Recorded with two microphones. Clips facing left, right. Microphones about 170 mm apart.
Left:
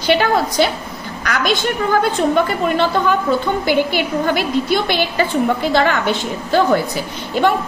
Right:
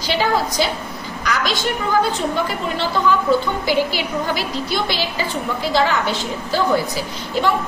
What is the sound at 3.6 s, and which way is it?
A woman's voice, 55° left (ahead or behind).